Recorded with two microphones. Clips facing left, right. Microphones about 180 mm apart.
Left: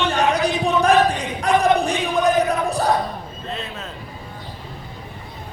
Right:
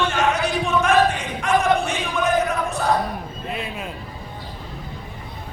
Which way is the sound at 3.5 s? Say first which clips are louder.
Right 1 dB; 10° right (ahead or behind).